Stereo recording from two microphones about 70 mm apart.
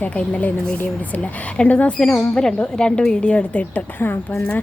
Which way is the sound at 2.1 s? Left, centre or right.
Left.